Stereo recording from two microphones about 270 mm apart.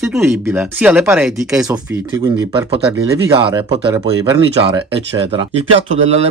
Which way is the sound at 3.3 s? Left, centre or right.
Centre.